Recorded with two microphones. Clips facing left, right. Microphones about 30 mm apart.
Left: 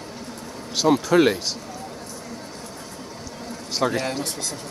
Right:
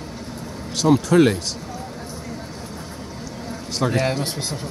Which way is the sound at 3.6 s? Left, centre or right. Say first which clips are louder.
Right 1 dB; centre.